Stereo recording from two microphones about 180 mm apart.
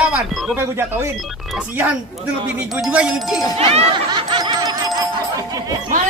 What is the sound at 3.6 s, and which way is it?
Music, 35° right (ahead or behind).